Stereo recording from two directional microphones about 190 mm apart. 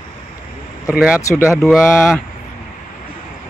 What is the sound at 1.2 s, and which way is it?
Speech, 15° left (ahead or behind).